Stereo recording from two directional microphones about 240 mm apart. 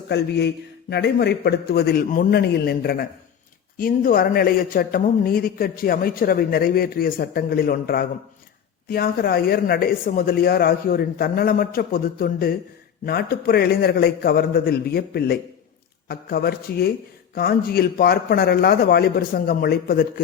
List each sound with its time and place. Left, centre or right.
0.1 s a man's voice: left